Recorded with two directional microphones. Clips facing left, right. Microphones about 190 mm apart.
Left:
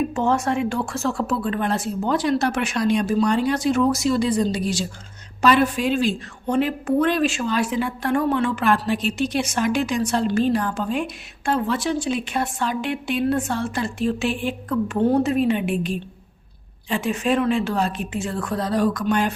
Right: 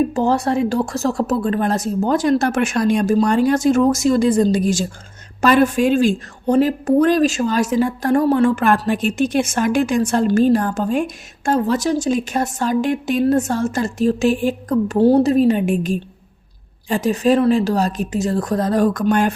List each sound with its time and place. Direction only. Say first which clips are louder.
0.1 s a woman's voice: right 4 dB; 35° right (ahead or behind)